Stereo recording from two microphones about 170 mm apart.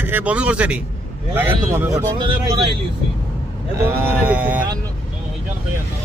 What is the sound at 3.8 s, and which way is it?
Speech, 15° right (ahead or behind).